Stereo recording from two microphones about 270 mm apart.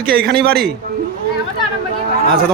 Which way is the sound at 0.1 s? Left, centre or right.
Right.